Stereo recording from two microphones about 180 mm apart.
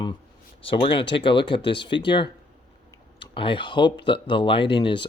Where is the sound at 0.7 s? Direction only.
30° left (ahead or behind).